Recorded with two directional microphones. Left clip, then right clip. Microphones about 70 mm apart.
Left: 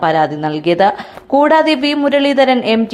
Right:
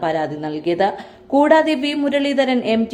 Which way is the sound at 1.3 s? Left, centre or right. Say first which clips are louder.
Left 3 dB; centre.